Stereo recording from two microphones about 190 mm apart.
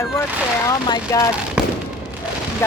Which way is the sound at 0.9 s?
20° left (ahead or behind).